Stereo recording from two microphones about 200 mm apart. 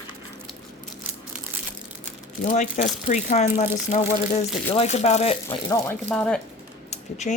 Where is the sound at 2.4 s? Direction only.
35° left (ahead or behind); by 6.4 s 5° left (ahead or behind).